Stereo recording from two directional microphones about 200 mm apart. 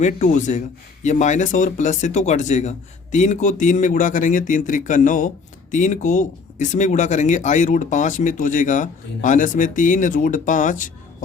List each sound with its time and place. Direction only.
0.0 s speech: 40° left (ahead or behind)